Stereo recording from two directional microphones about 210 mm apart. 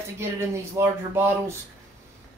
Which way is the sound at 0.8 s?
15° right (ahead or behind).